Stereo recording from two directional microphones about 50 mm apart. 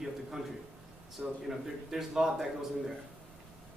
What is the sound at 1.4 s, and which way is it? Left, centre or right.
Speech, centre.